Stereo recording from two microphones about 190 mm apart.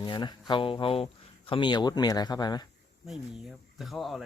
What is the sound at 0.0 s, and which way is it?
Speech, 25° left (ahead or behind).